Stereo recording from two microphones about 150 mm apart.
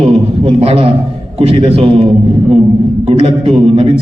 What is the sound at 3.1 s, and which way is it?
Speech, 35° right (ahead or behind).